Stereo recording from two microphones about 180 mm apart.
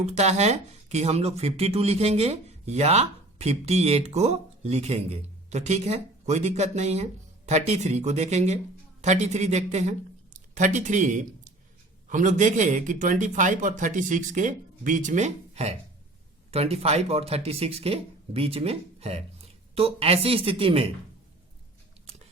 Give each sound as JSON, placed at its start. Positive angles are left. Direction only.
{"t": 0.0, "sound": "a man's voice", "side_deg": -35}